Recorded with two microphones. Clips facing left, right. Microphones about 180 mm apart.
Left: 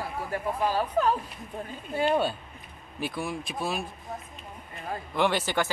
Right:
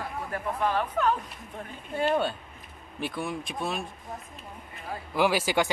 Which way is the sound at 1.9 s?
5° left (ahead or behind).